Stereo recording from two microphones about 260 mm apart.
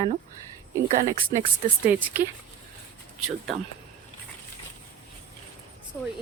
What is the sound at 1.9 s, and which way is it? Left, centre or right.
A woman's voice, centre.